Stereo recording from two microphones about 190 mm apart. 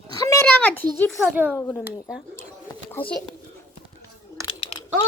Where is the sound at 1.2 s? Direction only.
10° right (ahead or behind).